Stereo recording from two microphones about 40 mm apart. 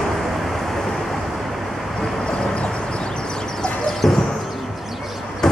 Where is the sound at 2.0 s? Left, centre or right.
Centre.